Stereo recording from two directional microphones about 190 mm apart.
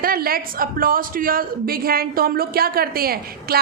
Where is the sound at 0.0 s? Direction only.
50° right (ahead or behind).